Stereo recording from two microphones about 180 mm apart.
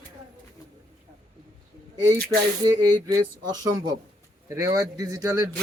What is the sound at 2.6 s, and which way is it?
Speech, 25° right (ahead or behind).